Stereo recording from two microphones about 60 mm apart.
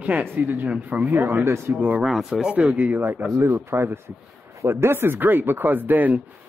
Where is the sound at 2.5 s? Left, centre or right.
Right.